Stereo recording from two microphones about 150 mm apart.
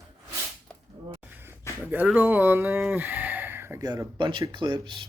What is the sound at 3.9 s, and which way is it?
Speech, 30° right (ahead or behind).